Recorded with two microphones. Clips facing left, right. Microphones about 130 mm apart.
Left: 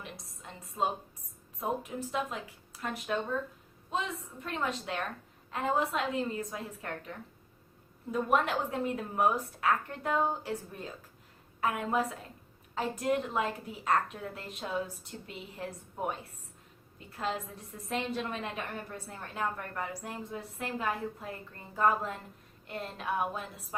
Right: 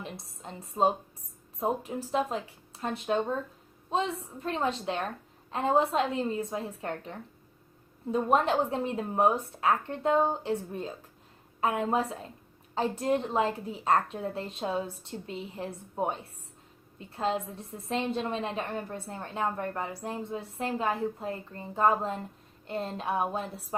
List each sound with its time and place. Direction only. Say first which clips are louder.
0.0 s a woman's voice: right 5 dB; 30° right (ahead or behind)